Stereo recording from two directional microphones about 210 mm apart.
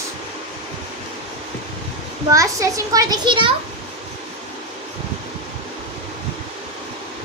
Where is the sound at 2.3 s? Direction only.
15° right (ahead or behind).